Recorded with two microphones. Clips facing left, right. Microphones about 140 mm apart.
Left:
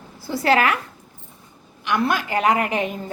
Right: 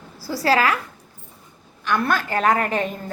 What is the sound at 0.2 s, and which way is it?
Speech, 25° left (ahead or behind).